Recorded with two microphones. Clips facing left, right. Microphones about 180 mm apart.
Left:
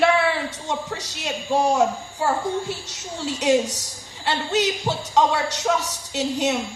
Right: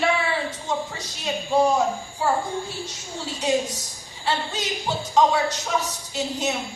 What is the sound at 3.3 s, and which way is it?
A woman's voice, 80° left.